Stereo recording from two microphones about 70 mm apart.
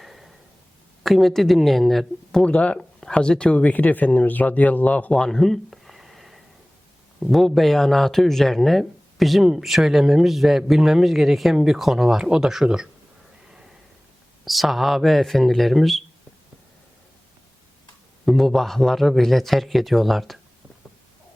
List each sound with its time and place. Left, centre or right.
0.0 s a sound: centre
1.0 s speech: centre
2.4 s speech: centre
5.1 s a sound: centre
7.2 s speech: centre
14.4 s speech: centre
18.3 s speech: centre